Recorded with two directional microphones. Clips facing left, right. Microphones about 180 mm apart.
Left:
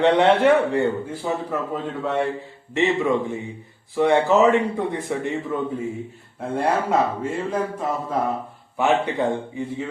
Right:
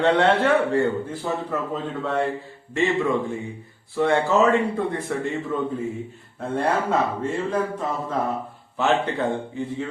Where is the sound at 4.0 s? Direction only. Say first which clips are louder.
Left 2 dB; 20° left (ahead or behind).